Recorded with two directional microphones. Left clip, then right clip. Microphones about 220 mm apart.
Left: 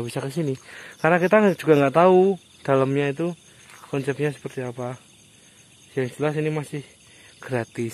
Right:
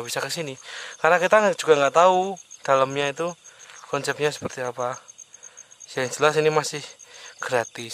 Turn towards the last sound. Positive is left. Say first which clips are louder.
# right 3 dB
turn(degrees=-15)  # may be behind; listen again after turning